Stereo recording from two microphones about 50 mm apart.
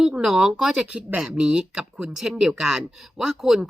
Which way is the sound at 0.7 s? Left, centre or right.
Right.